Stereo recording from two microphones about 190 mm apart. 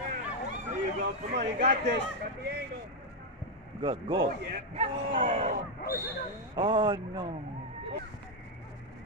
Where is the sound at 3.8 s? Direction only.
25° right (ahead or behind).